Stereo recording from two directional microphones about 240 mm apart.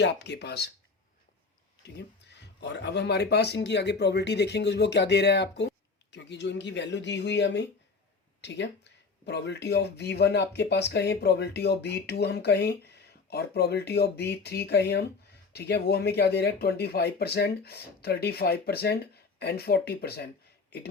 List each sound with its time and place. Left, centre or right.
0.0 s speech: left
2.4 s speech: left